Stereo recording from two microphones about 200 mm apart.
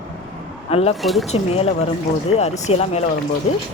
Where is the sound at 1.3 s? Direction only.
30° left (ahead or behind).